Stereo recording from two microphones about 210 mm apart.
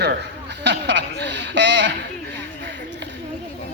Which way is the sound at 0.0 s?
55° right (ahead or behind).